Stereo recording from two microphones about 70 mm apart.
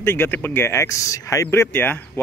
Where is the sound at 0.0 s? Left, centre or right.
Left.